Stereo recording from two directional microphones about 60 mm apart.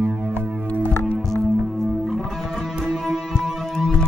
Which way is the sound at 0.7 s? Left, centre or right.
Left.